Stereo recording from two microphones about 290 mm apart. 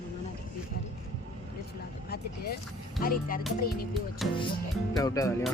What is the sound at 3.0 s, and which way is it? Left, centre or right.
Speech, left.